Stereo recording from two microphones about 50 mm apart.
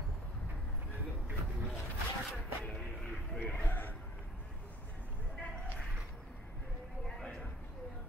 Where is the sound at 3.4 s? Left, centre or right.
Left.